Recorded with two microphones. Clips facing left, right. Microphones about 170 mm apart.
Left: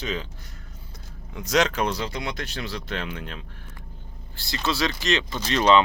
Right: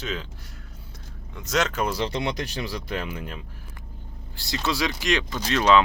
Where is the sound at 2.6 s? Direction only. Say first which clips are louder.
Right 1 dB; 10° right (ahead or behind).